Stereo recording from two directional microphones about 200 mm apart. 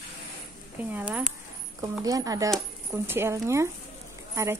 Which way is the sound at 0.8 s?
10° right (ahead or behind).